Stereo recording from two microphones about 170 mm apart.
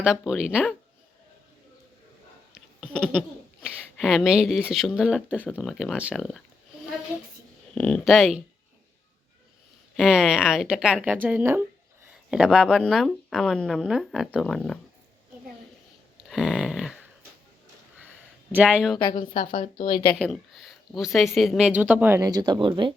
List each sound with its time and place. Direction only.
0.0 s speech: 5° right (ahead or behind)
2.6 s a sound: 5° left (ahead or behind)
4.7 s speech: centre (ahead or behind)
7.8 s speech: 5° left (ahead or behind)
9.9 s speech: centre (ahead or behind)
16.1 s a sound: centre (ahead or behind)
18.5 s a woman's voice: 5° right (ahead or behind)
19.3 s speech: 50° left (ahead or behind)
20.1 s speech: centre (ahead or behind); by 23.0 s 30° right (ahead or behind)